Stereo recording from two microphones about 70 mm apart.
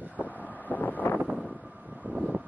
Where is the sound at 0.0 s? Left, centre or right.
Right.